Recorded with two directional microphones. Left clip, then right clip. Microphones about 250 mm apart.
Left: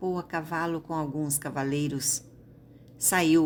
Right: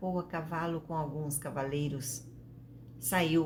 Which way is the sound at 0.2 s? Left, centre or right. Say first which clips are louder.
Left 5 dB; left.